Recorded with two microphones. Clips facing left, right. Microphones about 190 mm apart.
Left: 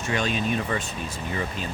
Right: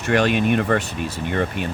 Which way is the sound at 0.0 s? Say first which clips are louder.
Right 8 dB; 65° right (ahead or behind).